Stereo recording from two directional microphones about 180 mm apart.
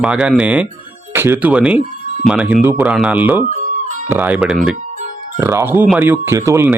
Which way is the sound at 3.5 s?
45° right (ahead or behind).